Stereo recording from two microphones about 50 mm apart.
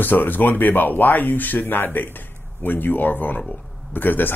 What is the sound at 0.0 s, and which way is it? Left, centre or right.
Speech, left.